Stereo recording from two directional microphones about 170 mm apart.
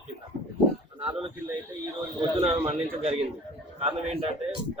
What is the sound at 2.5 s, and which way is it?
A man's voice, 35° right (ahead or behind).